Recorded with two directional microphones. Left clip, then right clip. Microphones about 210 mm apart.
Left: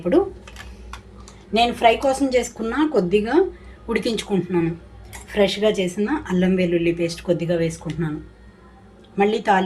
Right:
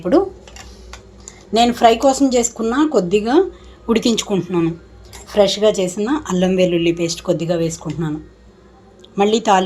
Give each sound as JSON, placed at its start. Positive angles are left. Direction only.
{"t": 1.5, "sound": "speech", "side_deg": -30}
{"t": 9.1, "sound": "speech", "side_deg": -30}